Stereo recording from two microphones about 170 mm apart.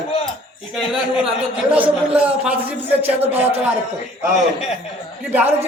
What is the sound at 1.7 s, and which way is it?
A man's voice, 10° right (ahead or behind).